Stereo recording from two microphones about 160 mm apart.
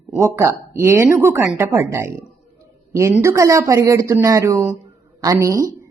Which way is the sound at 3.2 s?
20° right (ahead or behind).